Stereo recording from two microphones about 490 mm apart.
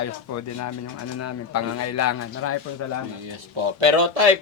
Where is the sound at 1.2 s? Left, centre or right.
Left.